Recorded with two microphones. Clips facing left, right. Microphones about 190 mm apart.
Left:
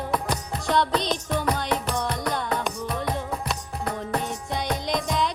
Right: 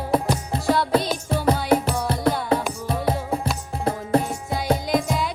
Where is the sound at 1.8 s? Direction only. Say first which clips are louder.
Right 2 dB; 5° right (ahead or behind).